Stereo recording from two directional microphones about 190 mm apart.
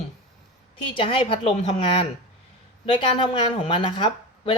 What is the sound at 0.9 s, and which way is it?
A woman's voice, 25° left (ahead or behind).